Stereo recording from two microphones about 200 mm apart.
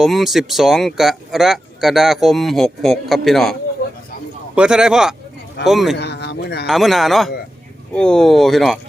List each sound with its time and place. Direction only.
0.0 s speech: centre (ahead or behind)
4.5 s speech: 5° right (ahead or behind)
6.0 s a sound: 55° left (ahead or behind)
6.7 s speech: centre (ahead or behind)